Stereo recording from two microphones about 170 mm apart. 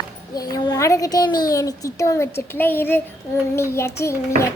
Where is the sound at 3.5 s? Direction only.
15° left (ahead or behind).